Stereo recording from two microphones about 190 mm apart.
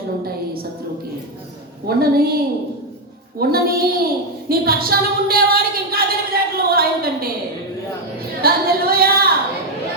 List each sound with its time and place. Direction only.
2.0 s child singing: 55° right (ahead or behind)
4.4 s a woman's voice: 55° right (ahead or behind)
8.4 s a sound: 50° right (ahead or behind)